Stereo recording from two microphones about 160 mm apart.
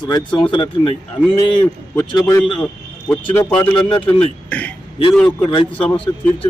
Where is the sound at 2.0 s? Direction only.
25° left (ahead or behind).